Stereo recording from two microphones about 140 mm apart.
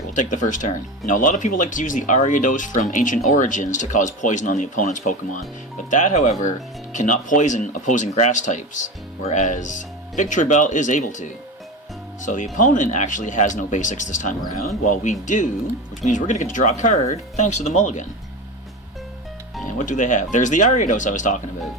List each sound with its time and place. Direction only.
0.1 s speech: 60° left (ahead or behind)
19.8 s speech: 65° left (ahead or behind)